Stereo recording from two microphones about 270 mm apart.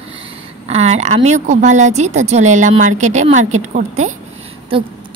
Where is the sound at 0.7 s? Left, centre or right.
Right.